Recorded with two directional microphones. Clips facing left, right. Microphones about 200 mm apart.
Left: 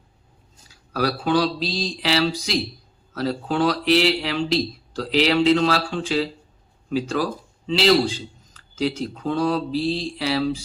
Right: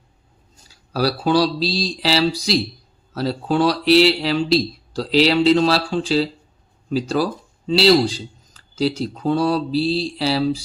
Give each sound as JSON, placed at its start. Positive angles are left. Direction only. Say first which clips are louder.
{"t": 0.9, "sound": "speech", "louder": "right 3 dB", "side_deg": -35}